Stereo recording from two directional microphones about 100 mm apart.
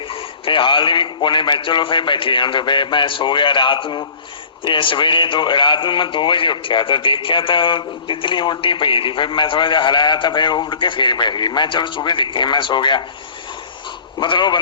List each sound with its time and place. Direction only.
0.1 s speech: 65° left (ahead or behind)
14.2 s a man's voice: 50° left (ahead or behind)